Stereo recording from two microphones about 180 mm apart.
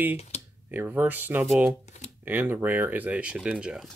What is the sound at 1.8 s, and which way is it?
Shuffling cards, 40° left (ahead or behind).